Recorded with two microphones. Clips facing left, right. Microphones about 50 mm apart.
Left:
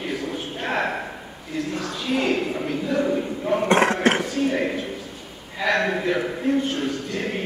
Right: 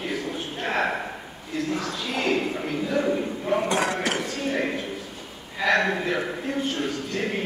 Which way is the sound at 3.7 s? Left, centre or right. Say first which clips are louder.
Left 6 dB; left.